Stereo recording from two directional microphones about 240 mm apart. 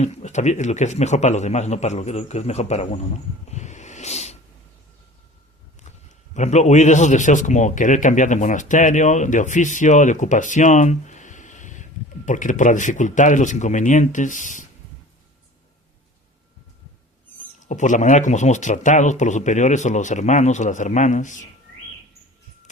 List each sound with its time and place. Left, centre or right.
0.0 s a man's voice: left
3.5 s a sound: left
5.8 s a man's voice: left
17.6 s a man's voice: left